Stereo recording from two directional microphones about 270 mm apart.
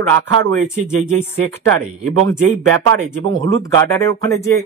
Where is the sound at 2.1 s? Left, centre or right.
Right.